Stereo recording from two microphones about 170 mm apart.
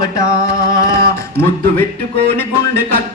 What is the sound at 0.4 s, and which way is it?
Music, 20° left (ahead or behind).